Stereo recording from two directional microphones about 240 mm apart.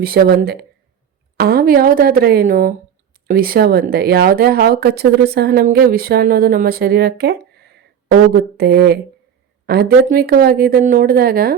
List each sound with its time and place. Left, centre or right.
0.0 s speech: right